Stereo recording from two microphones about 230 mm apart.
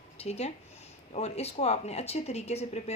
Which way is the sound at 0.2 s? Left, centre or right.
Left.